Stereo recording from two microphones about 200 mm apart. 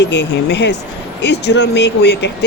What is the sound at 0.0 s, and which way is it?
Speech, 60° left (ahead or behind).